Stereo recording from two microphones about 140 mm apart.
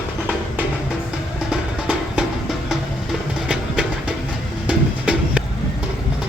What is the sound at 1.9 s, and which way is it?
Music, 5° right (ahead or behind).